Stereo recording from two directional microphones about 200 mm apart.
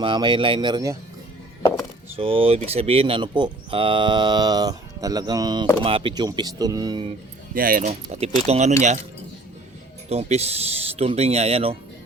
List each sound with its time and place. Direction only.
0.0 s speech: 25° right (ahead or behind)
2.1 s speech: 25° right (ahead or behind)
7.5 s speech: 45° right (ahead or behind)
10.1 s speech: 30° right (ahead or behind)